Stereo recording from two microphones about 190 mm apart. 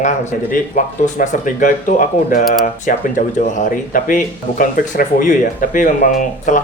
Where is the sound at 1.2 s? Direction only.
40° left (ahead or behind).